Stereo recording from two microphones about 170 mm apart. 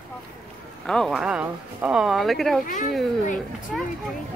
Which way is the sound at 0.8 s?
5° left (ahead or behind).